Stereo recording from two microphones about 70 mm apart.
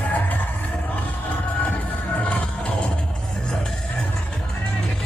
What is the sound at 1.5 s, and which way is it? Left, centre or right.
Music, left.